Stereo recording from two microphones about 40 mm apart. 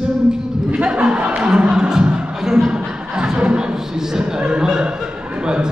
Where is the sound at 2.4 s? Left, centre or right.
Centre.